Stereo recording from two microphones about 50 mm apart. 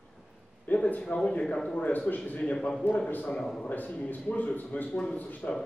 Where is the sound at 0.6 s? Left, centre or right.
Left.